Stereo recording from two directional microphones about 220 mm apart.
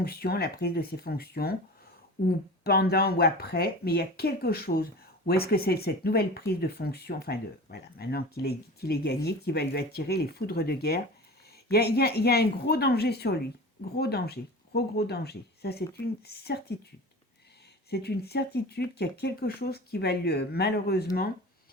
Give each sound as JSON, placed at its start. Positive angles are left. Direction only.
{"t": 0.0, "sound": "speech", "side_deg": 45}
{"t": 2.6, "sound": "speech", "side_deg": 45}
{"t": 17.9, "sound": "speech", "side_deg": 45}